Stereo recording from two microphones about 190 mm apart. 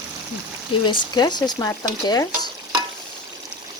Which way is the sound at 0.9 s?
25° left (ahead or behind).